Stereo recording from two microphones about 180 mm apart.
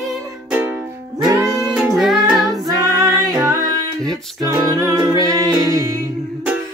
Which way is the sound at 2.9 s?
20° right (ahead or behind).